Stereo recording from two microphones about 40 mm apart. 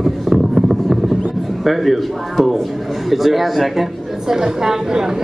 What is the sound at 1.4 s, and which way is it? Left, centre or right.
A man's voice, centre.